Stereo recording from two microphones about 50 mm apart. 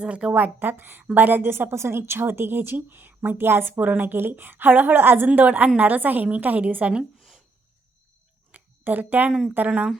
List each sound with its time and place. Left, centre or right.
0.0 s speech: right
0.3 s a woman's voice: right
5.5 s a woman's voice: right
7.2 s a sound: centre
8.5 s a sound: right
9.6 s speech: right